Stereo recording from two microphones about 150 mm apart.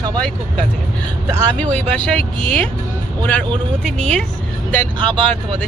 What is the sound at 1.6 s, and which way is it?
Speech, 10° left (ahead or behind).